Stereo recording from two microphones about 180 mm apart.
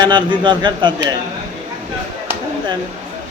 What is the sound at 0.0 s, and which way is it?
A man's voice, 25° right (ahead or behind).